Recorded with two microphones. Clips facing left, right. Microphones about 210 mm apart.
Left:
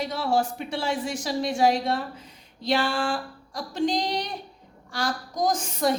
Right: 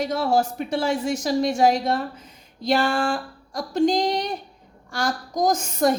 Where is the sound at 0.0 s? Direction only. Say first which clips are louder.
Right 4 dB; 45° right (ahead or behind).